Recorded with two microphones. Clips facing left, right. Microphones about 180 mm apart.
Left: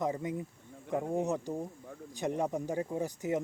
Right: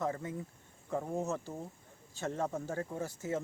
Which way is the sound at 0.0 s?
15° left (ahead or behind).